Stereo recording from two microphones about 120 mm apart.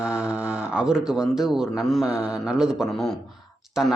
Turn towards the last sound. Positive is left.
turn(degrees=-5)  # may be behind; listen again after turning